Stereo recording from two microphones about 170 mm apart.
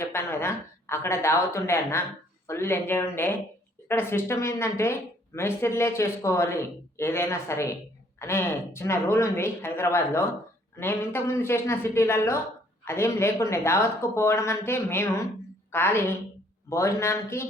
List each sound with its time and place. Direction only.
0.0 s speech: 15° left (ahead or behind)